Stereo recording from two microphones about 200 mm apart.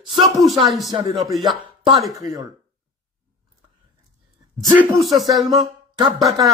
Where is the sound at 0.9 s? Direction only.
20° right (ahead or behind).